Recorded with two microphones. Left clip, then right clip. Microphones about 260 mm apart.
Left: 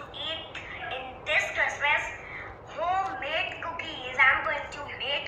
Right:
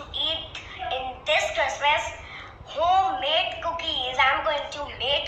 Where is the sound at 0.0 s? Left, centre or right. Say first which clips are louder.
Right 7 dB; right.